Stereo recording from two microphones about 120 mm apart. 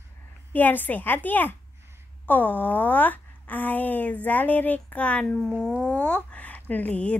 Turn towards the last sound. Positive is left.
turn(degrees=10)  # may be behind; listen again after turning